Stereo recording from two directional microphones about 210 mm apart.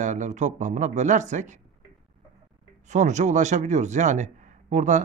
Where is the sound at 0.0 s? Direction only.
35° right (ahead or behind).